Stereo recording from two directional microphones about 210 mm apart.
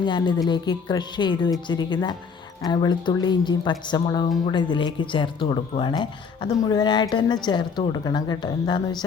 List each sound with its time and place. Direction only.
0.0 s speech: 20° left (ahead or behind)